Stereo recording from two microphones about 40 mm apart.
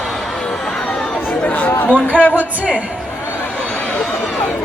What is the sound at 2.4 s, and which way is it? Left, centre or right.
Speech, left.